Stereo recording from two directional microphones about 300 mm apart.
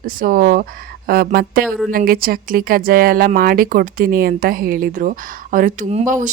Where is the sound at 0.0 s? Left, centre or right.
Right.